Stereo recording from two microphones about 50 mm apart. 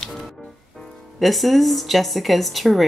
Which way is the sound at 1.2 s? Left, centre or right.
Centre.